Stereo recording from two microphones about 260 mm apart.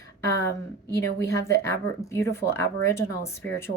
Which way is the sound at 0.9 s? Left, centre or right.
Centre.